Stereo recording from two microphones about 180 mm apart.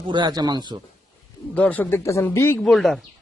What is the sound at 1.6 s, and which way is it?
Speech, 10° left (ahead or behind).